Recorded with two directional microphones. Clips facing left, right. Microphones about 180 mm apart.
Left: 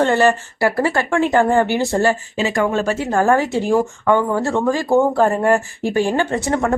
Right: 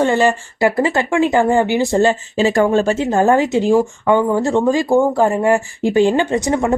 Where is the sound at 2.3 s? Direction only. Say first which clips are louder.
Right 5 dB; 30° right (ahead or behind).